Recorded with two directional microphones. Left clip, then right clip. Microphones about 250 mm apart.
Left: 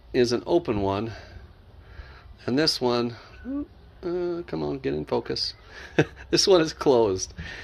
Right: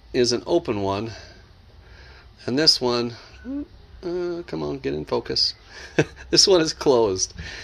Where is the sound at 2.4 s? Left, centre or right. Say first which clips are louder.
Right 4 dB; centre.